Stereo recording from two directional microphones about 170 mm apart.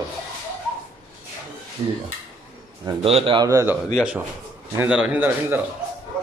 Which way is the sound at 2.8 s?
35° right (ahead or behind).